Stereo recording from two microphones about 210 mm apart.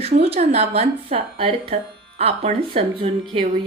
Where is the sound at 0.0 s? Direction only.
30° right (ahead or behind).